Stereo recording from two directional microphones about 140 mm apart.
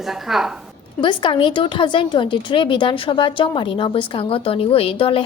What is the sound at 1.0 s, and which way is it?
A woman's voice, 35° left (ahead or behind).